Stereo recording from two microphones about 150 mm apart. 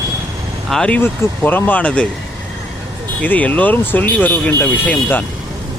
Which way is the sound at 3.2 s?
10° left (ahead or behind).